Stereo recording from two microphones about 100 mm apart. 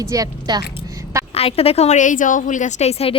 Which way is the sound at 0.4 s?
40° right (ahead or behind).